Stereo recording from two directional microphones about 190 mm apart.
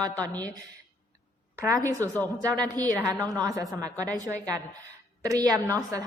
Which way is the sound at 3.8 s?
20° right (ahead or behind).